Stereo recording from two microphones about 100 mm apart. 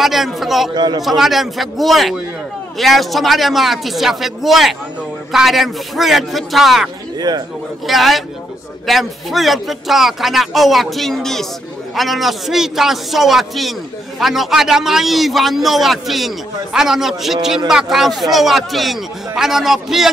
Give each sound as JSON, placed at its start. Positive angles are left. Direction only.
{"t": 0.0, "sound": "a man's voice", "side_deg": 0}
{"t": 0.7, "sound": "speech", "side_deg": -45}
{"t": 1.0, "sound": "a man's voice", "side_deg": 0}
{"t": 7.2, "sound": "speech", "side_deg": -40}
{"t": 7.8, "sound": "a man's voice", "side_deg": 0}